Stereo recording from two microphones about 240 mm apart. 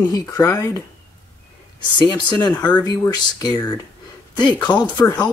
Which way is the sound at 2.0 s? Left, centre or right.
Centre.